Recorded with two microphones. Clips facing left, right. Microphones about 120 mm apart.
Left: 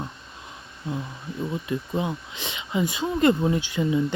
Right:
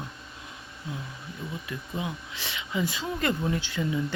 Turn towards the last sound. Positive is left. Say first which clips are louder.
# left 5 dB
turn(degrees=15)  # may be behind; listen again after turning